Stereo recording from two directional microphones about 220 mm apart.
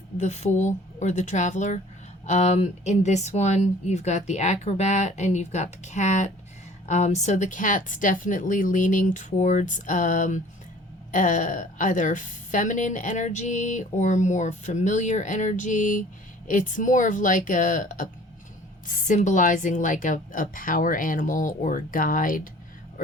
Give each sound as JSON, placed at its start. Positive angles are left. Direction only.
{"t": 0.2, "sound": "a woman's voice", "side_deg": 30}